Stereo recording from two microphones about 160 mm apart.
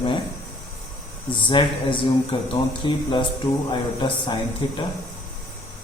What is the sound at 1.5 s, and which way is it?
A man's voice, 30° left (ahead or behind).